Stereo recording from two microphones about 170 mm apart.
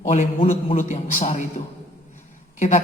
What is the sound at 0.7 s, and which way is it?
Speech, 50° left (ahead or behind).